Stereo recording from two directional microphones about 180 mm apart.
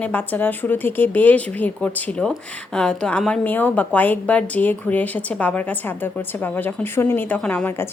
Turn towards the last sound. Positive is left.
turn(degrees=10)  # may be behind; listen again after turning